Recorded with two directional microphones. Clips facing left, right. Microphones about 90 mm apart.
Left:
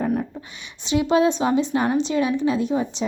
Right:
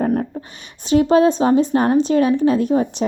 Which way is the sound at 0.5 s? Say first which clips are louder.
Right 7 dB; 45° right (ahead or behind).